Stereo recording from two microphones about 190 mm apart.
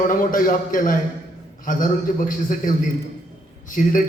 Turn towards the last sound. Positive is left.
turn(degrees=45)  # may be behind; listen again after turning